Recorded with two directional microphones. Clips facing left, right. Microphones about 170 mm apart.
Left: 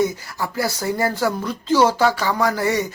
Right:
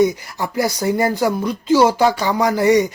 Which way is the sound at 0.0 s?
20° right (ahead or behind).